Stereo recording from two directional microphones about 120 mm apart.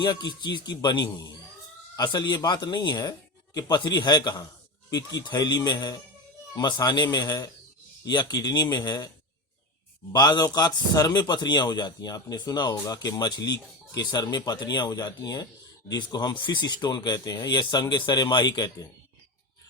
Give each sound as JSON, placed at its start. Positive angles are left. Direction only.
{"t": 0.0, "sound": "a man's voice", "side_deg": 35}
{"t": 10.1, "sound": "a man's voice", "side_deg": 35}